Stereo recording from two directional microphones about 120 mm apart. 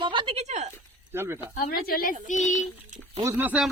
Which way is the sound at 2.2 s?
90° left.